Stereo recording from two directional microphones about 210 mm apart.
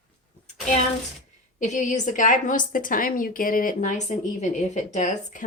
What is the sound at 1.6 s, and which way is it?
A woman's voice, 35° left (ahead or behind).